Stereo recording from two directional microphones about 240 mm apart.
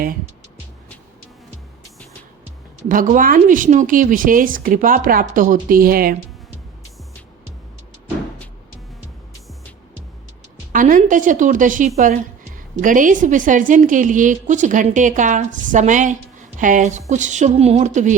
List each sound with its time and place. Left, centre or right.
2.9 s a woman's voice: right
10.7 s a woman's voice: right